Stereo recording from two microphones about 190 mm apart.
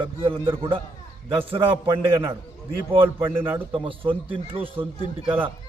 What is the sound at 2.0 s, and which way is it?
A man's voice, 10° right (ahead or behind).